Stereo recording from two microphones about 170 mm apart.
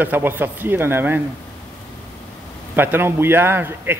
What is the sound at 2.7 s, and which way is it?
Speech, 10° right (ahead or behind).